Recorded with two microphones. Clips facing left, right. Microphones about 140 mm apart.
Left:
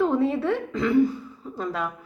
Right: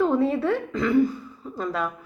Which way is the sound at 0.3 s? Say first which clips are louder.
Right 1 dB; 20° left (ahead or behind).